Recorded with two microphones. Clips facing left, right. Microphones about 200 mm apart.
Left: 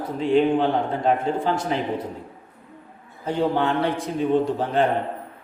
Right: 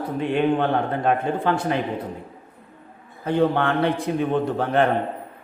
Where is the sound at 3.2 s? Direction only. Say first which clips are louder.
Right 2 dB; 60° right (ahead or behind).